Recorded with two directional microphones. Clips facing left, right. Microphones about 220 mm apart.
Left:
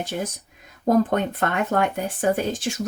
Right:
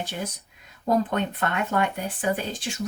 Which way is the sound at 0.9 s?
50° left (ahead or behind).